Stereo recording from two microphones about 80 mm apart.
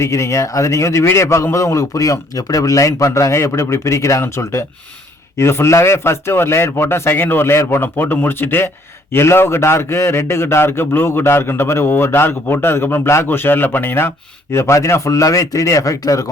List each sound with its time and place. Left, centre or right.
0.0 s a man's voice: left
14.5 s a man's voice: left